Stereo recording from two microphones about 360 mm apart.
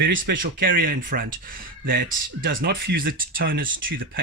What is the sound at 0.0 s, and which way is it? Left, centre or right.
Speech, right.